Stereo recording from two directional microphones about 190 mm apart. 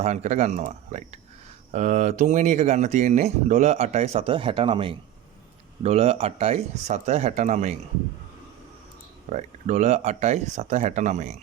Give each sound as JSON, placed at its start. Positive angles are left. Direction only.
{"t": 0.0, "sound": "speech", "side_deg": -35}
{"t": 9.3, "sound": "speech", "side_deg": -40}